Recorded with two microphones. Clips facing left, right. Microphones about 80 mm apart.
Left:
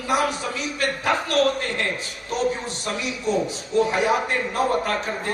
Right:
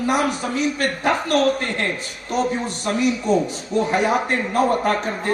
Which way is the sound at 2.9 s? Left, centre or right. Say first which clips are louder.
Right 6 dB; right.